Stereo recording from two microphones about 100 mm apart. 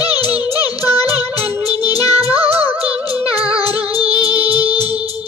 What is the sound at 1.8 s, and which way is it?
Music, 40° left (ahead or behind).